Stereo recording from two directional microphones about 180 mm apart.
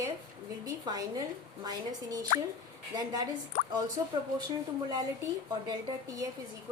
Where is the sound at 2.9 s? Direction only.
20° right (ahead or behind).